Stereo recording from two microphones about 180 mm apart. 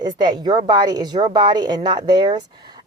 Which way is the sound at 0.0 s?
25° right (ahead or behind).